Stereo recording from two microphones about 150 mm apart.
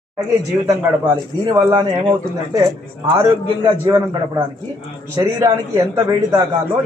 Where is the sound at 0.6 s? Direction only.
25° right (ahead or behind).